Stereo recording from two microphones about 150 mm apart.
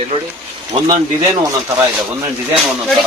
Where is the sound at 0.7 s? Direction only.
30° right (ahead or behind).